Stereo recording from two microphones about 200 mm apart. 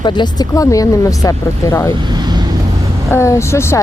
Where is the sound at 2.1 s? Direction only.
20° right (ahead or behind).